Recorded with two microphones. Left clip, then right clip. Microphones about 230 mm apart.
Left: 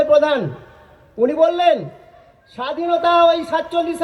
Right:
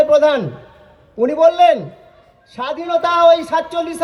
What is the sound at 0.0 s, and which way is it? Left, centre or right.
A man's voice, right.